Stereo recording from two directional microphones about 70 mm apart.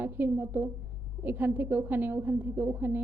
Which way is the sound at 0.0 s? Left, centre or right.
Right.